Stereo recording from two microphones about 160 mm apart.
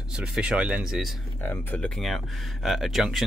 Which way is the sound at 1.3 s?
10° left (ahead or behind).